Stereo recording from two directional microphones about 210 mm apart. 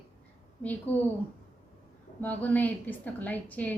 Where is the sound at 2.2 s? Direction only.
5° left (ahead or behind).